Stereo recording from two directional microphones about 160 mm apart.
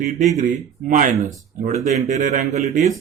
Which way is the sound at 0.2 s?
45° right (ahead or behind).